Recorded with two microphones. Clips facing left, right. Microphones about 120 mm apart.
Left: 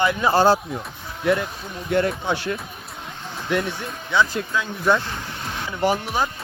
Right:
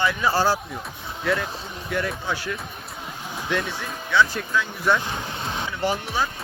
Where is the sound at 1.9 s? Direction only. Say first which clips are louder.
Left 6 dB; 30° left (ahead or behind).